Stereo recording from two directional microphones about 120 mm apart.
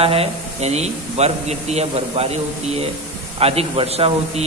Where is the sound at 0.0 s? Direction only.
55° right (ahead or behind).